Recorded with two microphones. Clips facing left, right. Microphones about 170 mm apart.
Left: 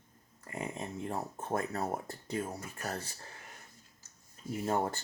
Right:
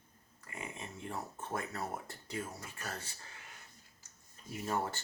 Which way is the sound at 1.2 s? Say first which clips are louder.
Left 5 dB; 35° left (ahead or behind).